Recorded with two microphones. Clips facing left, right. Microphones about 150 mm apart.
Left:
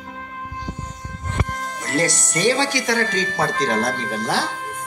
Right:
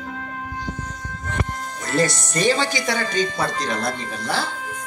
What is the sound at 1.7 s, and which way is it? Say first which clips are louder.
Speech: right 1 dB; 70° left (ahead or behind).